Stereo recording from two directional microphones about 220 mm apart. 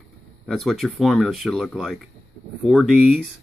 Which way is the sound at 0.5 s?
Centre (ahead or behind).